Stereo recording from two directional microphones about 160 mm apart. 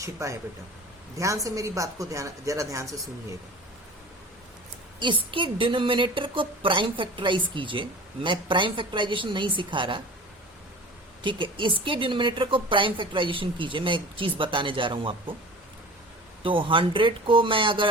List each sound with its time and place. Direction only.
0.0 s a woman's voice: 20° right (ahead or behind)
4.9 s a woman's voice: 30° right (ahead or behind)
11.2 s a woman's voice: 30° right (ahead or behind)
16.4 s a woman's voice: 35° right (ahead or behind)